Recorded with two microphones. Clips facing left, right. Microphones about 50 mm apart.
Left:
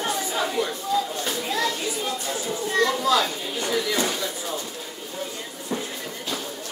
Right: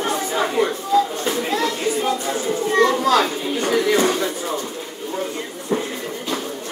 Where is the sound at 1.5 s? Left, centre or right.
Right.